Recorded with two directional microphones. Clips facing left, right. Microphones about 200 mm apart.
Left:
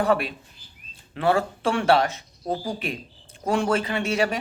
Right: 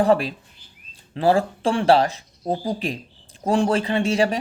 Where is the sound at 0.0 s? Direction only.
35° right (ahead or behind).